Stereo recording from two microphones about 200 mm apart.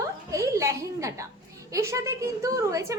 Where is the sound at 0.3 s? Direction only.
15° right (ahead or behind).